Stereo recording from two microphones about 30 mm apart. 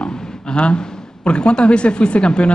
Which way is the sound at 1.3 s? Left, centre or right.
Left.